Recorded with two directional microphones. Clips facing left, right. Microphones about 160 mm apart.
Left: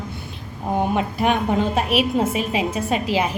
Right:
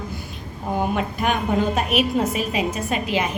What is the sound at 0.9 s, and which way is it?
A woman's voice, 30° left (ahead or behind).